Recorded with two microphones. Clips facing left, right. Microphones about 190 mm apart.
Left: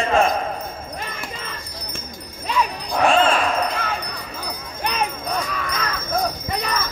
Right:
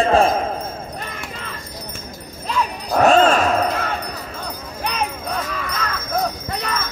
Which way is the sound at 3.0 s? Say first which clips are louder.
Right 4 dB; 40° right (ahead or behind).